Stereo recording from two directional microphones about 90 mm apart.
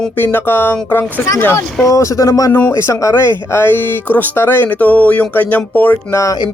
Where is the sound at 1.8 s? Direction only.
35° left (ahead or behind).